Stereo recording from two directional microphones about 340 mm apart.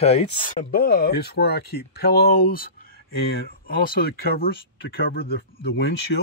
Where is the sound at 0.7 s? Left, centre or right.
Left.